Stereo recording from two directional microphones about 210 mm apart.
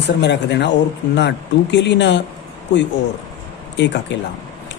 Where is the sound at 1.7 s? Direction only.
55° left (ahead or behind).